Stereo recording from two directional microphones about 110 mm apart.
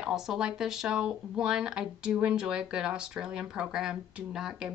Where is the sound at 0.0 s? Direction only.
5° right (ahead or behind).